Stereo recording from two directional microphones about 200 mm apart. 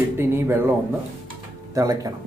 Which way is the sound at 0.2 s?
10° right (ahead or behind).